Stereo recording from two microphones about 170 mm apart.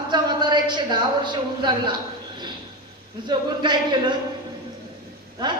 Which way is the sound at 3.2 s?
25° right (ahead or behind).